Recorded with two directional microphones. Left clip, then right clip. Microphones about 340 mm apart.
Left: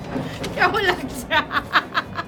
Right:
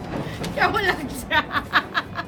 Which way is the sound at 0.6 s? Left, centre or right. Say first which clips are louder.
Left 2 dB; centre.